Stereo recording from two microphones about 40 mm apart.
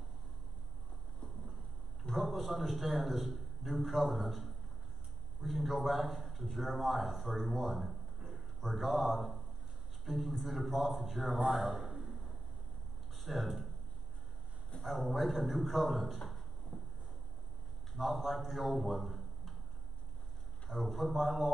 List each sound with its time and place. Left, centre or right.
2.1 s a man's voice: centre
11.5 s a sound: centre
14.8 s a man's voice: centre
16.7 s a sound: centre
17.9 s a man's voice: centre
20.7 s a man's voice: centre